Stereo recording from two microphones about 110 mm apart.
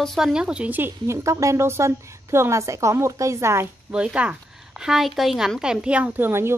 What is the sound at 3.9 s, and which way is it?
A woman's voice, 10° right (ahead or behind).